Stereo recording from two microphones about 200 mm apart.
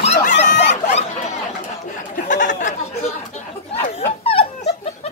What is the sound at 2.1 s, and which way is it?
Chatter, 40° left (ahead or behind).